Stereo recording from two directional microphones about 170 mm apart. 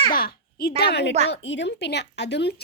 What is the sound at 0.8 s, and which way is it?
Speech, 80° left.